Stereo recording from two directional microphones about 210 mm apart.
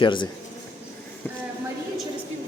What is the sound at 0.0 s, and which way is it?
Speech, 20° left (ahead or behind).